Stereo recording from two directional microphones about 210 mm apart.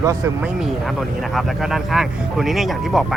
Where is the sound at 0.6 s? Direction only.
Centre (ahead or behind).